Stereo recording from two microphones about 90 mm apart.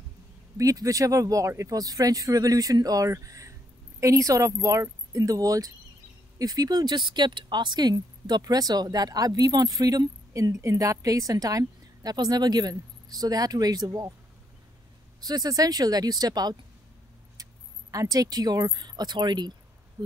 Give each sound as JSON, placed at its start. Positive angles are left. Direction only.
{"t": 0.6, "sound": "speech", "side_deg": -40}
{"t": 15.1, "sound": "speech", "side_deg": -45}
{"t": 17.9, "sound": "speech", "side_deg": -40}